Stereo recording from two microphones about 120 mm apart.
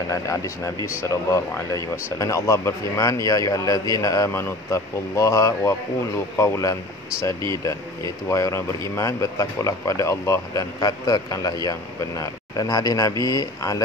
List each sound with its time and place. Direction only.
0.1 s a man's voice: 25° left (ahead or behind)